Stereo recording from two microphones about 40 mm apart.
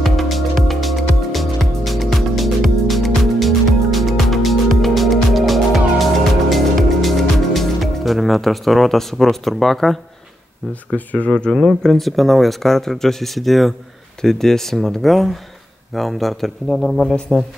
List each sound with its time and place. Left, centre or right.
0.0 s music: centre
10.9 s speech: left
11.2 s speech: left
11.5 s speech: centre